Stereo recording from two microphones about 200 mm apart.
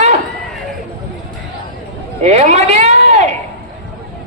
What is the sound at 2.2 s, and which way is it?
Speech, 35° right (ahead or behind).